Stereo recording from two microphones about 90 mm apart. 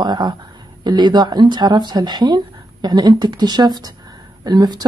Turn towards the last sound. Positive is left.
turn(degrees=-50)  # may be behind; listen again after turning